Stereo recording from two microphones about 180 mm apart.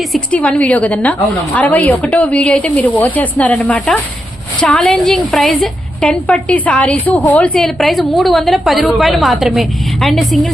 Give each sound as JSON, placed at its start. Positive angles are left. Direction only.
{"t": 0.1, "sound": "a woman's voice", "side_deg": 5}